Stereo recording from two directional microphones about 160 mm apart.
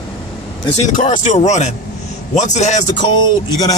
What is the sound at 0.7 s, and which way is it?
Speech, 45° left (ahead or behind).